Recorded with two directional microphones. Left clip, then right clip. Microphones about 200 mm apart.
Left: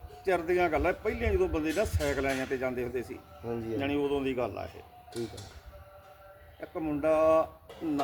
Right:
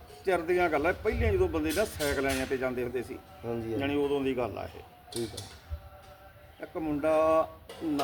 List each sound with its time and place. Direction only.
0.3 s a man's voice: 10° left (ahead or behind)
3.4 s speech: 5° right (ahead or behind)
3.8 s a man's voice: 10° left (ahead or behind)
5.1 s speech: 45° right (ahead or behind)
6.6 s a man's voice: 10° left (ahead or behind)